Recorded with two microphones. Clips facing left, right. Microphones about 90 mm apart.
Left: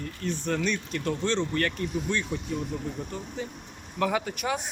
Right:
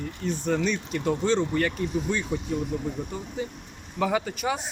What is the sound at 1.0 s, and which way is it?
Speech, 20° right (ahead or behind).